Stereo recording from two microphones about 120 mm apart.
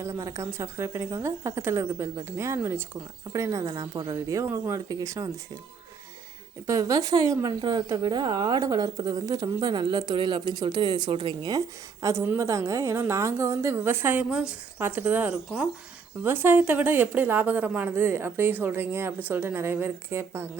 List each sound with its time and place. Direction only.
0.0 s a woman's voice: 25° right (ahead or behind)
6.7 s a woman's voice: 25° right (ahead or behind)
12.0 s a woman's voice: 25° right (ahead or behind)